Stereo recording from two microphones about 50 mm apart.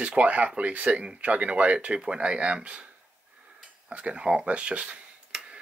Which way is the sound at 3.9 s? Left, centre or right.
Right.